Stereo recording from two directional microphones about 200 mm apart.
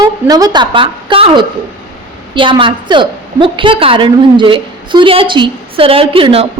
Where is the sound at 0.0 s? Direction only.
20° right (ahead or behind).